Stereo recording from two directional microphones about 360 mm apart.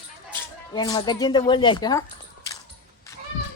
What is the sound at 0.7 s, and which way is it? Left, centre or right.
Speech, centre.